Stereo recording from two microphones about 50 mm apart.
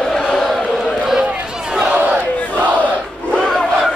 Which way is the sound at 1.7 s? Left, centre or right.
Right.